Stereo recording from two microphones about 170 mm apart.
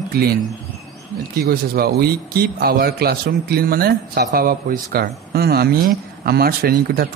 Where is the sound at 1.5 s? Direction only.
65° right (ahead or behind).